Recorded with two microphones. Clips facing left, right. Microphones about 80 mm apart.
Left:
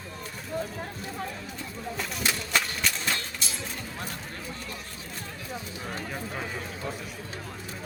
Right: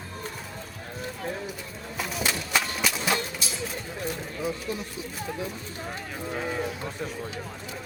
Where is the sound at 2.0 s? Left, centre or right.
Centre.